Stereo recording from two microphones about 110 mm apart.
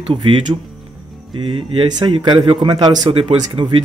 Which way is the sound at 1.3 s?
55° right (ahead or behind).